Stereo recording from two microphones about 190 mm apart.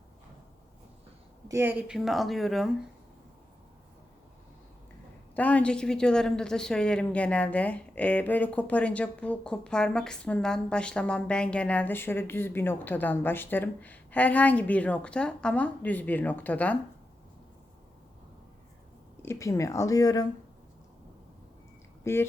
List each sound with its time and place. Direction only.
1.5 s speech: 10° right (ahead or behind)
5.3 s speech: 10° left (ahead or behind)
19.2 s speech: 15° left (ahead or behind)
22.0 s speech: 10° left (ahead or behind)